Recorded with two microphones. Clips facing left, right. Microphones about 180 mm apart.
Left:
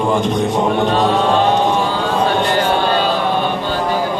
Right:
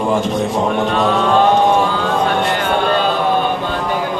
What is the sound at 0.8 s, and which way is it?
Chant, 35° left (ahead or behind).